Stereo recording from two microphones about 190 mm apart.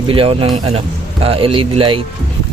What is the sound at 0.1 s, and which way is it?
Speech, 30° right (ahead or behind).